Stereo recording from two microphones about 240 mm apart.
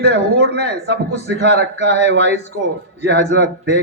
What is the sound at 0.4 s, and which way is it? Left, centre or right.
Speech, right.